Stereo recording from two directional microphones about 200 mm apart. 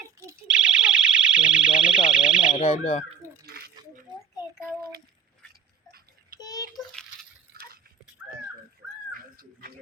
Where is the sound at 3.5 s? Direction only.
50° right (ahead or behind).